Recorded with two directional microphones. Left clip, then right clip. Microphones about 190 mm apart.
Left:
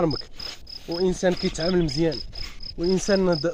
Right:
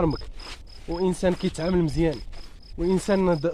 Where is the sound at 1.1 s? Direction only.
50° right (ahead or behind).